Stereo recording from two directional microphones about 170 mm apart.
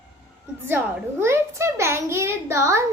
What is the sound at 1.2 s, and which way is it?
A child's voice, 15° right (ahead or behind).